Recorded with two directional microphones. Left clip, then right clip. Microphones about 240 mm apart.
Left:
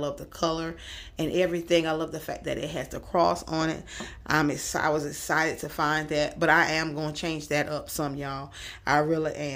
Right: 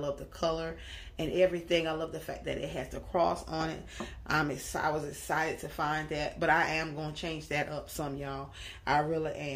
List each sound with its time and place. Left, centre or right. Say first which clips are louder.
0.0 s speech: left 4 dB; left